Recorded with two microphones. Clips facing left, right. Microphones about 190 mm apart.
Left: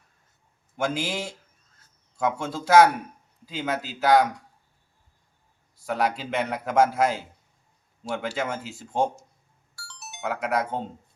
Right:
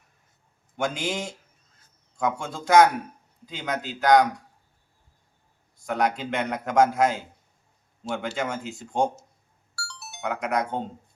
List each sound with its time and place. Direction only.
0.8 s a man's voice: 5° left (ahead or behind)
5.8 s a man's voice: 5° left (ahead or behind)
9.7 s music: 20° left (ahead or behind)
10.2 s a man's voice: centre (ahead or behind)